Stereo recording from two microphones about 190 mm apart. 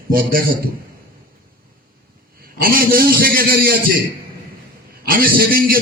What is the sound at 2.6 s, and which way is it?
A man's voice, 50° right (ahead or behind).